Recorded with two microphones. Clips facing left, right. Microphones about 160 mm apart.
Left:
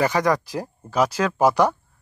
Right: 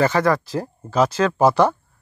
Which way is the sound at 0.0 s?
15° left (ahead or behind).